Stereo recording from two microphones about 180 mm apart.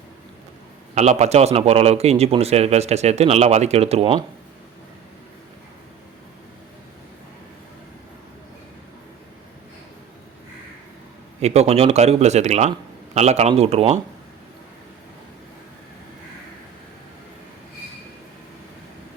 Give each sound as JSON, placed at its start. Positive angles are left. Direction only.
{"t": 0.9, "sound": "a man's voice", "side_deg": -40}
{"t": 11.3, "sound": "a man's voice", "side_deg": -35}